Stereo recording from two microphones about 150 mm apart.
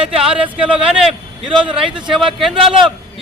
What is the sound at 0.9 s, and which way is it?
A man's voice, 5° right (ahead or behind).